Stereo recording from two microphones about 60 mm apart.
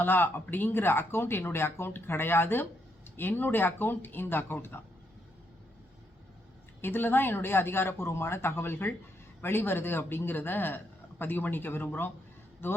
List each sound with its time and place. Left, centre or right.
0.0 s speech: left
6.8 s speech: left